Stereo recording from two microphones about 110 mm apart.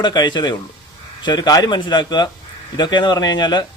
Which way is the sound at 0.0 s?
40° left (ahead or behind).